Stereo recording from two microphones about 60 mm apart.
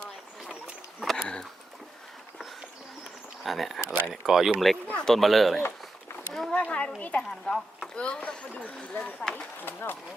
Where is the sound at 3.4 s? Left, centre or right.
Centre.